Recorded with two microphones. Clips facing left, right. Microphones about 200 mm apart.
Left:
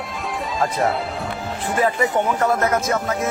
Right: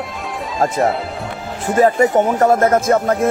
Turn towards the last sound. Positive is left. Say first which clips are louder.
# right 7 dB
turn(degrees=-55)  # may be behind; listen again after turning